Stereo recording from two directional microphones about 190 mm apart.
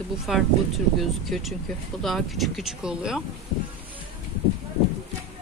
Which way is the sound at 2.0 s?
Centre (ahead or behind).